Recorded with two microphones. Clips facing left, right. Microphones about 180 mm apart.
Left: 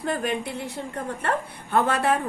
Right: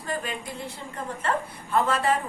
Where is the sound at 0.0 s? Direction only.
65° left (ahead or behind).